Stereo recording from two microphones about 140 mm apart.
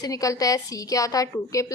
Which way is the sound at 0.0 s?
25° left (ahead or behind).